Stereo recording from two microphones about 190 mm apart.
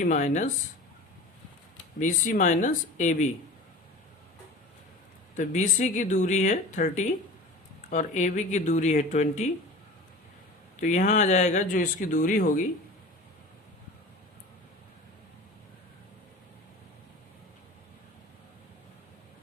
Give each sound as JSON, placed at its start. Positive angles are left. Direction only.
{"t": 0.0, "sound": "speech", "side_deg": 40}
{"t": 2.0, "sound": "speech", "side_deg": 45}
{"t": 5.4, "sound": "speech", "side_deg": 40}
{"t": 10.8, "sound": "speech", "side_deg": 40}